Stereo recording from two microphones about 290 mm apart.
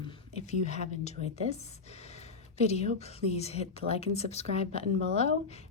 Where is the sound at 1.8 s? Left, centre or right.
Left.